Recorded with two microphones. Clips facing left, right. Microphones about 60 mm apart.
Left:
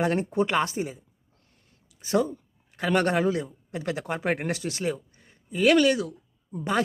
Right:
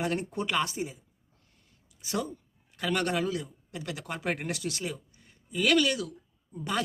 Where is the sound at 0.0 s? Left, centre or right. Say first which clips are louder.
Left 6 dB; left.